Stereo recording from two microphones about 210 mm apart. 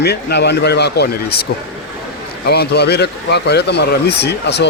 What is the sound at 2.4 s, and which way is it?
Speech, 50° left (ahead or behind).